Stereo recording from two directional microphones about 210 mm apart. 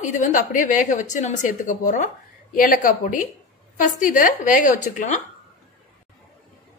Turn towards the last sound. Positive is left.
turn(degrees=35)  # may be behind; listen again after turning